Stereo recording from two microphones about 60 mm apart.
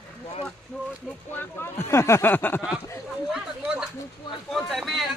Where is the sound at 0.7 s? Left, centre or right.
Left.